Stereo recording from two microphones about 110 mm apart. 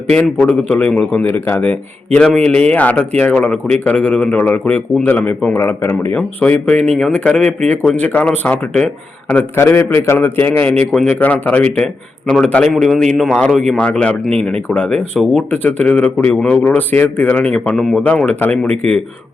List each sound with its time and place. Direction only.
0.1 s a man's voice: 10° left (ahead or behind)
10.7 s a man's voice: 5° left (ahead or behind)